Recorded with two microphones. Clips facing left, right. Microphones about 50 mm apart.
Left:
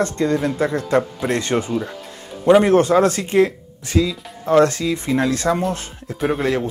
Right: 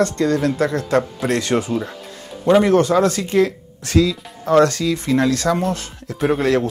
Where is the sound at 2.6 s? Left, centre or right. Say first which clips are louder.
Left 1 dB; left.